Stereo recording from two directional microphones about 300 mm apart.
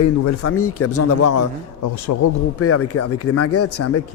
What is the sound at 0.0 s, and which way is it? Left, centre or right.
Speech, left.